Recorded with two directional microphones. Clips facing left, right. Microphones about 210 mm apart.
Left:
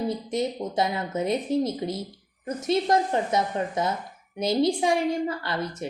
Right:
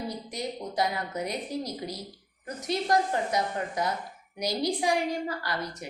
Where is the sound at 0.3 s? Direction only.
25° left (ahead or behind).